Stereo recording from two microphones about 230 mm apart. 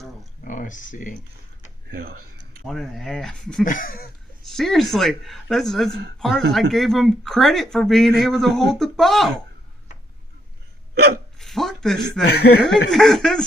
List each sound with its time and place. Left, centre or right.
0.4 s speech: left
1.9 s speech: right
2.6 s speech: centre
3.6 s a sound: left
4.4 s speech: centre
5.9 s speech: right
6.1 s speech: centre
11.3 s a sound: centre
12.3 s speech: left
12.9 s speech: centre